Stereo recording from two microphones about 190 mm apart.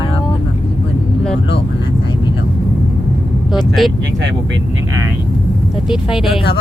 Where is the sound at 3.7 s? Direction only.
Centre (ahead or behind).